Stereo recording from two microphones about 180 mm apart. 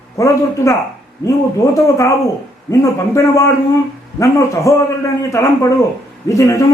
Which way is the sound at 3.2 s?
15° left (ahead or behind).